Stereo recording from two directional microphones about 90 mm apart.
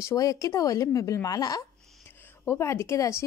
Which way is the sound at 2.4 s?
30° left (ahead or behind).